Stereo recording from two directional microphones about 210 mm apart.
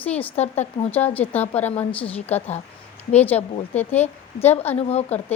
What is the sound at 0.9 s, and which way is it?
Speech, 10° left (ahead or behind).